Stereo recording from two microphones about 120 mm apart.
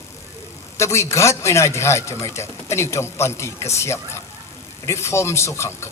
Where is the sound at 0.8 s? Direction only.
25° left (ahead or behind).